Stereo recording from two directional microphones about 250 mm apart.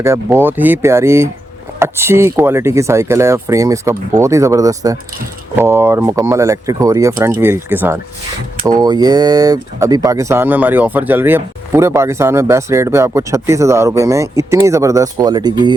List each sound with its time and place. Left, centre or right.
0.0 s speech: centre